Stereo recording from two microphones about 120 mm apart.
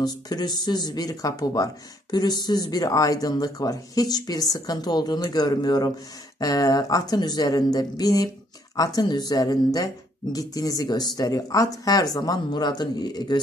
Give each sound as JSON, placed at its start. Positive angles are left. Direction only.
{"t": 0.0, "sound": "speech", "side_deg": 35}